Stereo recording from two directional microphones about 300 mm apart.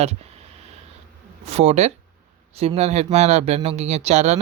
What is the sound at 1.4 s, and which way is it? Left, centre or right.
Speech, right.